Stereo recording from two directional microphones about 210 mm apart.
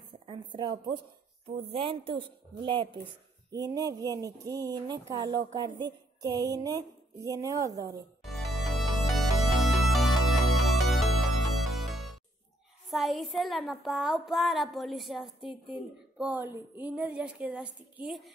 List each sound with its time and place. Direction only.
0.3 s a woman's voice: 20° right (ahead or behind)
8.2 s music: centre (ahead or behind)
12.9 s a sound: centre (ahead or behind)
16.2 s speech: 10° right (ahead or behind)